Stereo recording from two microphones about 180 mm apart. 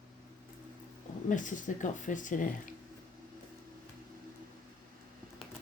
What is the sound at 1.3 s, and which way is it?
Speech, 45° left (ahead or behind).